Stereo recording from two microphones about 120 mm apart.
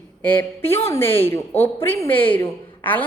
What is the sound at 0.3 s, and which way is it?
A woman's voice, 20° left (ahead or behind).